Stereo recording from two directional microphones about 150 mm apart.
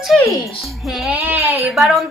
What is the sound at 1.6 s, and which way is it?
Speech, centre (ahead or behind).